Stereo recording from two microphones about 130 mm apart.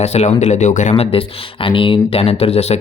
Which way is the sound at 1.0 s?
45° left (ahead or behind).